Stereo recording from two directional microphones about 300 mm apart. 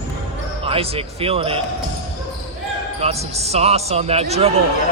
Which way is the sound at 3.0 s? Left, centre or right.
Centre.